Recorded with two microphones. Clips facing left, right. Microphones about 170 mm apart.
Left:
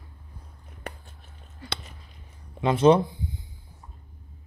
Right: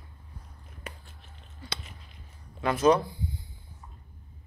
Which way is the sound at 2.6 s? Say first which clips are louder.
Left 4 dB; 30° left (ahead or behind).